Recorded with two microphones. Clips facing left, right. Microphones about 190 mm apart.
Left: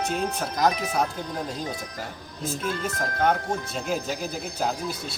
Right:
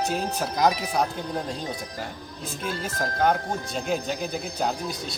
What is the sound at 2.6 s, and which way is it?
Speech, 30° right (ahead or behind).